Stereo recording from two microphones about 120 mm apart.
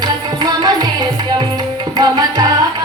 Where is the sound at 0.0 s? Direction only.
35° right (ahead or behind).